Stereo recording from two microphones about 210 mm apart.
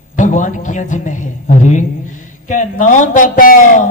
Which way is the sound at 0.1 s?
35° left (ahead or behind).